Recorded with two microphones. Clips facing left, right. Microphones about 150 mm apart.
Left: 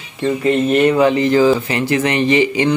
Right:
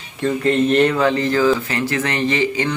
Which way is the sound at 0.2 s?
10° left (ahead or behind).